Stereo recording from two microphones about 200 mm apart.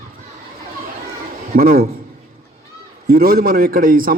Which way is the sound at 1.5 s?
45° right (ahead or behind).